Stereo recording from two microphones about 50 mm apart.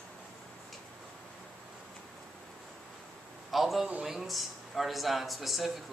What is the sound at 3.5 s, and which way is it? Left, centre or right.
A man's voice, centre.